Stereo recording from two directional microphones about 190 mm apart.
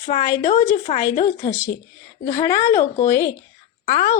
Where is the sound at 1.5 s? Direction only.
10° left (ahead or behind).